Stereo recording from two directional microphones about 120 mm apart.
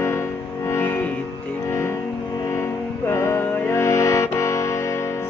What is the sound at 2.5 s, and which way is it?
Music, 25° left (ahead or behind).